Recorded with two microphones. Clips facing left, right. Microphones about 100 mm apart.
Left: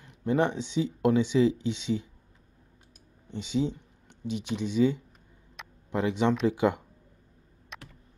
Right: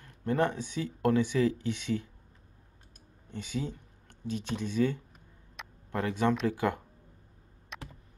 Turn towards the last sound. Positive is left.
turn(degrees=0)  # may be behind; listen again after turning